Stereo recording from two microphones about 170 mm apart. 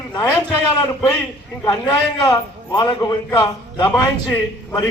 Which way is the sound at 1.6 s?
5° left (ahead or behind).